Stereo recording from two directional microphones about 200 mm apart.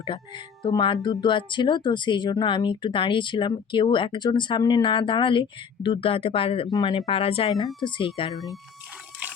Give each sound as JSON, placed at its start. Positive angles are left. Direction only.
{"t": 0.0, "sound": "speech", "side_deg": 25}
{"t": 7.0, "sound": "speech", "side_deg": 30}